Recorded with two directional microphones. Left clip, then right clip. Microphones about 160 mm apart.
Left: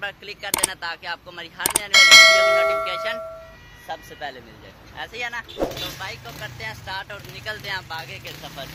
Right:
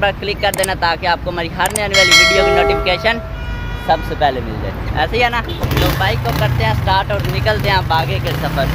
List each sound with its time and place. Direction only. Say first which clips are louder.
0.0 s speech: right 15 dB; 10° left (ahead or behind)
1.9 s speech: even; centre (ahead or behind)